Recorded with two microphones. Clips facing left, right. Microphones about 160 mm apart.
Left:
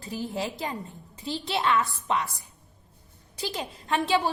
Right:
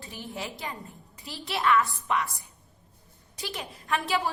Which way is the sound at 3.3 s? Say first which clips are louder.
Left 4 dB; 30° left (ahead or behind).